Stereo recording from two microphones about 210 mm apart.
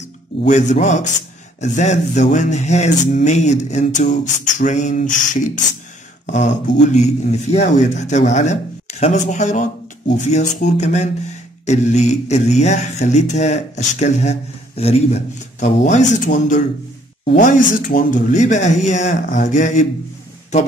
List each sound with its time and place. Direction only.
0.4 s speech: 35° left (ahead or behind)
6.9 s speech: 30° left (ahead or behind)